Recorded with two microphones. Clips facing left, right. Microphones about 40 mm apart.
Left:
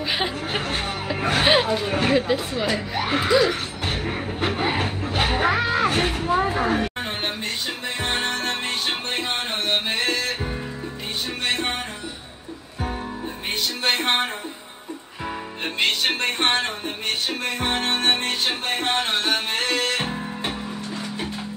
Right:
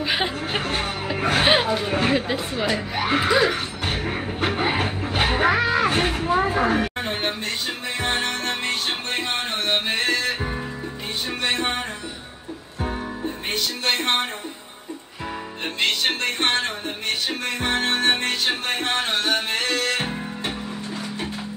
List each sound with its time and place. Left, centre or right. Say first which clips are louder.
0.0 s speech: right 1 dB; centre
6.3 s a sound: right 1 dB; centre
8.0 s music: even; centre
11.4 s music: right 1 dB; centre
13.5 s music: left 1 dB; centre
16.2 s speech: left 1 dB; left
17.5 s music: right 1 dB; centre
18.5 s speech: right 1 dB; centre
19.1 s music: even; centre